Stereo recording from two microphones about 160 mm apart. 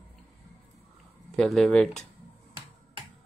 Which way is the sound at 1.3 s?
5° left (ahead or behind).